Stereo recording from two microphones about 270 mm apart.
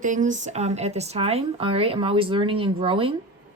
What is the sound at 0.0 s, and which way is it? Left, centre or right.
Speech, right.